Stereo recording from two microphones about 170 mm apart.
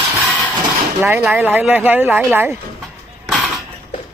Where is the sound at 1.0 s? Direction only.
10° right (ahead or behind).